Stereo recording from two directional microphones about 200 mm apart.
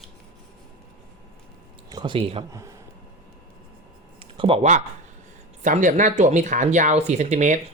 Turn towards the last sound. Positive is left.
turn(degrees=-35)  # may be behind; listen again after turning